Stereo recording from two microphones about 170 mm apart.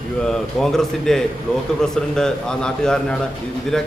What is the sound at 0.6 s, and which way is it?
A man's voice, centre (ahead or behind).